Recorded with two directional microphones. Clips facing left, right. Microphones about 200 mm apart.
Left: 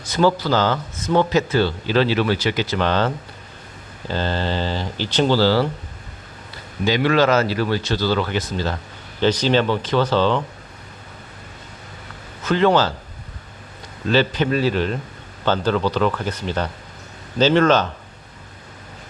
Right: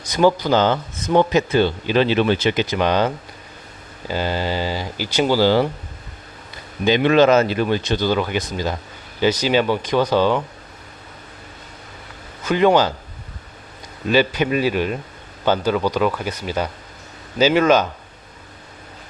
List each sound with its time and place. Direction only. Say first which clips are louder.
0.1 s speech: right 2 dB; 15° right (ahead or behind)
4.1 s speech: right 1 dB; 10° right (ahead or behind)
6.8 s speech: right 3 dB; 20° right (ahead or behind)
12.5 s speech: right 1 dB; 15° right (ahead or behind)
14.1 s speech: right 1 dB; 10° right (ahead or behind)